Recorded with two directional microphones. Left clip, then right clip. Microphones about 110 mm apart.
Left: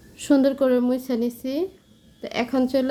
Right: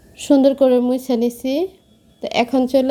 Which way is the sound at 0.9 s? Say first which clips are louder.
Right 6 dB; 35° right (ahead or behind).